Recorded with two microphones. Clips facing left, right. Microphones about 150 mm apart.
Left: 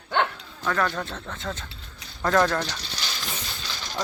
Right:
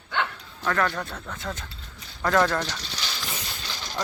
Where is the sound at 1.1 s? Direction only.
30° left (ahead or behind).